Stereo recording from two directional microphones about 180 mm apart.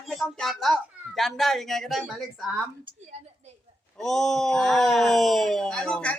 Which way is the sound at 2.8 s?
30° right (ahead or behind).